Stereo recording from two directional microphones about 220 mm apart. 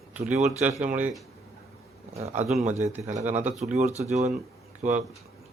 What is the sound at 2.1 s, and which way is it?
Speech, 30° right (ahead or behind).